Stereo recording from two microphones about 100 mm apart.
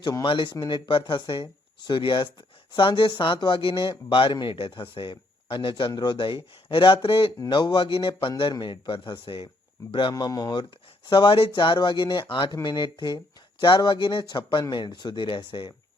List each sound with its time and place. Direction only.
0.3 s speech: 55° left (ahead or behind)
7.3 s speech: 45° left (ahead or behind)
7.9 s speech: 65° left (ahead or behind)
9.9 s speech: 50° left (ahead or behind)